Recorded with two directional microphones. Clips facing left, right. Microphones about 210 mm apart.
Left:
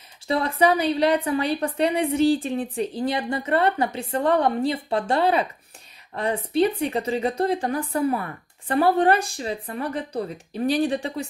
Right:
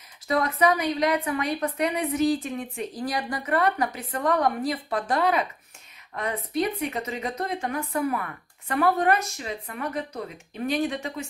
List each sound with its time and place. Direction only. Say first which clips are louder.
0.3 s a woman's voice: left 2 dB; 30° left (ahead or behind)